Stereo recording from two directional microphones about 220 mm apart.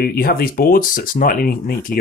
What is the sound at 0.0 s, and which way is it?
Speech, 45° left (ahead or behind).